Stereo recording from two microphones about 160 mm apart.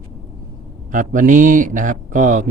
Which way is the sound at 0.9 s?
55° right (ahead or behind).